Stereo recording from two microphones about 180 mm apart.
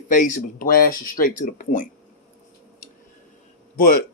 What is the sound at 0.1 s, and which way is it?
Speech, 45° left (ahead or behind).